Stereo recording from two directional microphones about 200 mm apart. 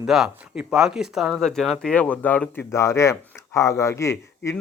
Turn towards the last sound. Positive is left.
turn(degrees=15)  # may be behind; listen again after turning